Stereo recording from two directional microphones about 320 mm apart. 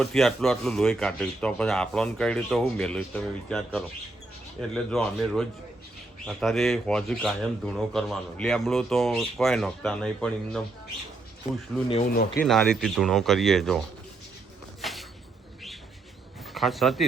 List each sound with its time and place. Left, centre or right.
0.0 s speech: centre
11.9 s speech: left
12.4 s speech: centre
14.8 s a sound: centre
16.6 s speech: centre